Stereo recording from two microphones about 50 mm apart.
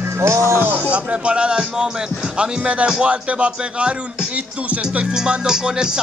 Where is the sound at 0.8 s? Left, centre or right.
Right.